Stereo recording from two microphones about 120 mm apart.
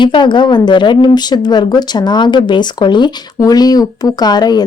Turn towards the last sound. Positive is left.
turn(degrees=35)  # may be behind; listen again after turning